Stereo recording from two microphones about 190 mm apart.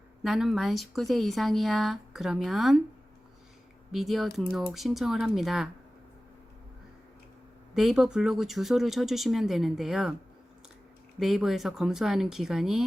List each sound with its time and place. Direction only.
0.2 s speech: centre (ahead or behind)
3.9 s speech: centre (ahead or behind)
7.7 s speech: centre (ahead or behind)
11.2 s speech: centre (ahead or behind)